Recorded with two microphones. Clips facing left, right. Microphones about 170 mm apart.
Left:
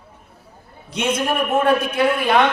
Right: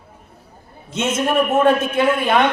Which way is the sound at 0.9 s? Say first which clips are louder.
Right 2 dB; 25° right (ahead or behind).